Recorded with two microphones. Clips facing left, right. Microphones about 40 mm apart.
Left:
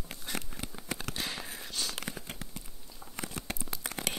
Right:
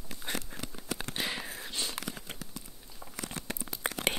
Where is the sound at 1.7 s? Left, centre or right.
Right.